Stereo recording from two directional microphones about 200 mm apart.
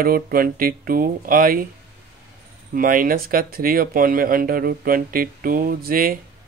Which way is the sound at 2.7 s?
45° right (ahead or behind).